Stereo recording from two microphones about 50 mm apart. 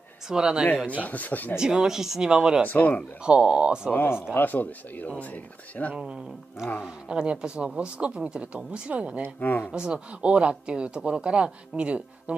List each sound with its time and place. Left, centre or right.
0.3 s speech: centre
1.0 s speech: left
1.6 s speech: centre
2.7 s speech: left
3.3 s speech: centre
4.1 s speech: left
7.1 s speech: centre
9.4 s speech: left
9.7 s speech: centre